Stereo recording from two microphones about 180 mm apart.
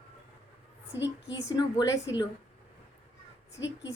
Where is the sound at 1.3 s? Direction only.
25° left (ahead or behind).